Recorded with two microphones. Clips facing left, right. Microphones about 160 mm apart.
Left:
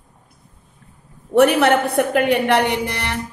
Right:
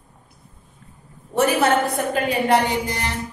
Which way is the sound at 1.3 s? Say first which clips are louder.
Left 4 dB; 65° left (ahead or behind).